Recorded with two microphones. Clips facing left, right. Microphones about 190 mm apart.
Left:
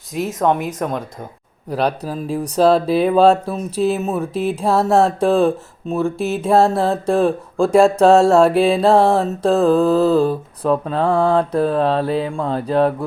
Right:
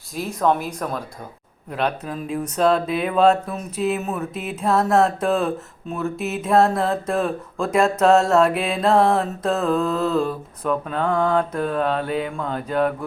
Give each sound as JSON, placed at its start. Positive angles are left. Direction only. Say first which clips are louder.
{"t": 0.4, "sound": "speech", "louder": "left 2 dB", "side_deg": 20}
{"t": 1.7, "sound": "speech", "louder": "left 4 dB", "side_deg": 35}